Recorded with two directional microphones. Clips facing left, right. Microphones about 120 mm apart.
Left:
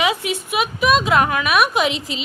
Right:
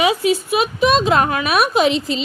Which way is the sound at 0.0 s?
30° right (ahead or behind).